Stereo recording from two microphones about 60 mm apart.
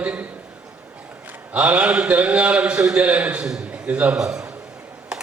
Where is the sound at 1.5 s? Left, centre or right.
Right.